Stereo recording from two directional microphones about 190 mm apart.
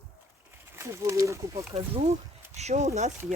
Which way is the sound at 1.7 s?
30° right (ahead or behind).